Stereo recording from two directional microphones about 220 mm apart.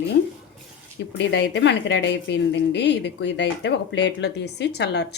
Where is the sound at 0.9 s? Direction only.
55° left (ahead or behind).